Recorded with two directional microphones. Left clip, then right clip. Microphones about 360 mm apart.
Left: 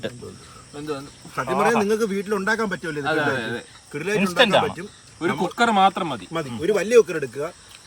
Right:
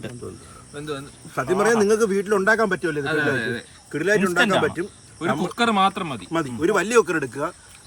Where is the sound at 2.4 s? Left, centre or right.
Centre.